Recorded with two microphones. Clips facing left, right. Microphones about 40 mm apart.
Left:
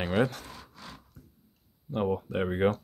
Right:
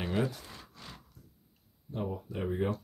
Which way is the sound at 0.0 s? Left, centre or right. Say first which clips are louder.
Left 5 dB; left.